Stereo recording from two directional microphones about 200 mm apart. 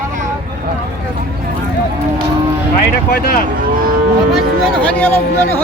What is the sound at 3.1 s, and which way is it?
Speech, 50° left (ahead or behind).